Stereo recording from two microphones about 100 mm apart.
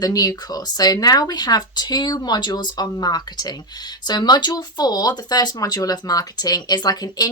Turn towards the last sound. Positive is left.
turn(degrees=40)  # may be behind; listen again after turning